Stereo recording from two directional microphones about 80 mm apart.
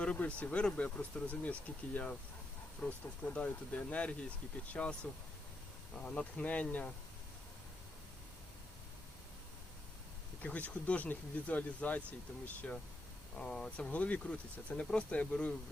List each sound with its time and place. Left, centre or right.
0.0 s speech: centre
6.0 s speech: centre
10.4 s speech: centre